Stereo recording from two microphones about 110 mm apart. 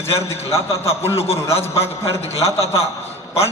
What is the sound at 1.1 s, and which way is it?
A man's voice, 65° left (ahead or behind).